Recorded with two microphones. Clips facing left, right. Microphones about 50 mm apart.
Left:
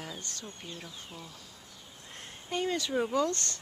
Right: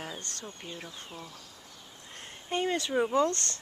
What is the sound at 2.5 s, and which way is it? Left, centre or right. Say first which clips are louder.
Speech: right 2 dB; right.